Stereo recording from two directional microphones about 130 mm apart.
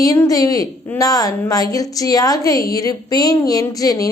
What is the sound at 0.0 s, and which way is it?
A woman's voice, 25° left (ahead or behind).